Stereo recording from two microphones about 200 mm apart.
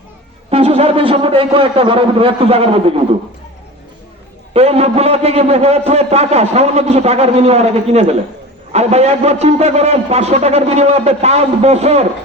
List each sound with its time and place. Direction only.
0.5 s a man's voice: 30° right (ahead or behind)
4.5 s a man's voice: 30° right (ahead or behind)